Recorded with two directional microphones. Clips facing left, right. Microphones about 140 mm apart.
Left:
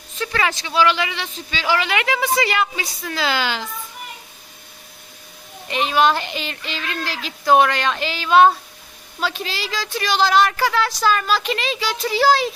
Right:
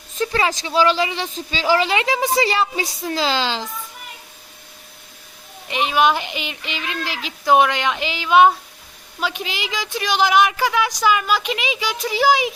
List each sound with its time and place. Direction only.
0.2 s speech: 30° right (ahead or behind)
5.6 s speech: 10° right (ahead or behind)